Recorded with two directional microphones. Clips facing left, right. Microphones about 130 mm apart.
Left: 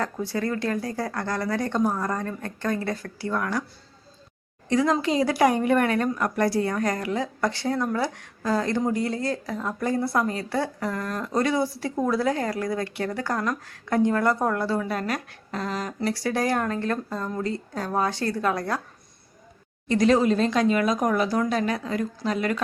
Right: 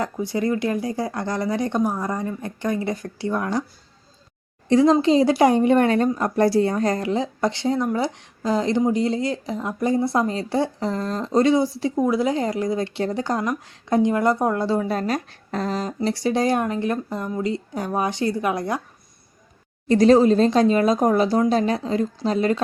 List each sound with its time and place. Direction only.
0.0 s speech: 15° right (ahead or behind)
4.7 s a woman's voice: 25° right (ahead or behind)
19.9 s a woman's voice: 35° right (ahead or behind)